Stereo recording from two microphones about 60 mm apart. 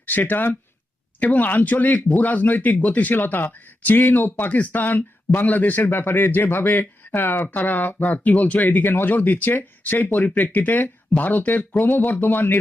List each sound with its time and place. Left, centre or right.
0.0 s speech: left